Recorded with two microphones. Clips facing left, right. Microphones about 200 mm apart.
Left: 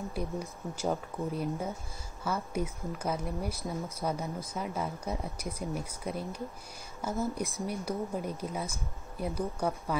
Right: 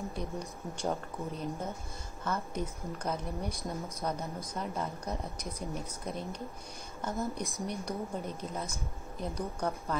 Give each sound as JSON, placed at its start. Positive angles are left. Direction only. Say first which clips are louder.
{"t": 0.1, "sound": "speech", "louder": "left 2 dB", "side_deg": 5}